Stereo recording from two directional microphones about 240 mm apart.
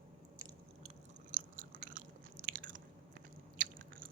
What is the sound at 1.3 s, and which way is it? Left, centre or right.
Chewing, right.